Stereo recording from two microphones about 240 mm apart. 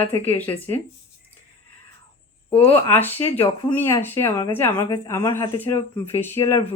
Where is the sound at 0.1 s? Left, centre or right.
Centre.